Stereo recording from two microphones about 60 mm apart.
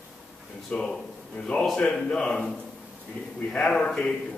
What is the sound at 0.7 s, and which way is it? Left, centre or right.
Speech, centre.